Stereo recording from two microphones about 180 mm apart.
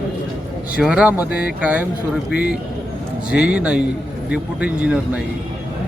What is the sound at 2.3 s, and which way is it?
Speech, 60° left (ahead or behind).